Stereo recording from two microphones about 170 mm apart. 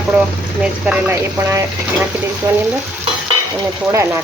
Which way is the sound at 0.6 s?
10° right (ahead or behind).